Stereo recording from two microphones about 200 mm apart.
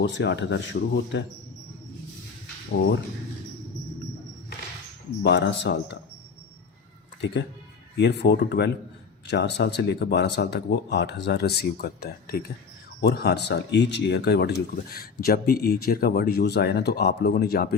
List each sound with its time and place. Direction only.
0.0 s speech: 60° left (ahead or behind)
5.2 s speech: 60° left (ahead or behind)
7.9 s speech: 55° left (ahead or behind)